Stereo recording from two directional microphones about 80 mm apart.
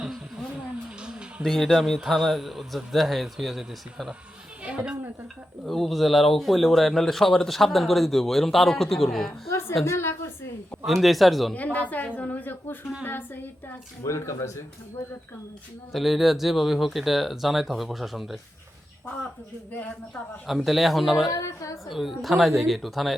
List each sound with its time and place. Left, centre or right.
0.0 s a sound: centre
1.4 s speech: centre
4.6 s a woman's voice: centre
5.6 s speech: centre
9.5 s a sound: left
10.8 s speech: centre
11.5 s a woman's voice: centre
14.0 s speech: left
15.9 s speech: centre
19.7 s a woman's voice: centre
20.7 s speech: centre
21.4 s speech: left
21.8 s speech: centre